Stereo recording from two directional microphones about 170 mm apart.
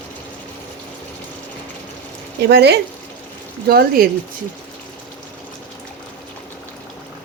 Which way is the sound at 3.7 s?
60° right (ahead or behind).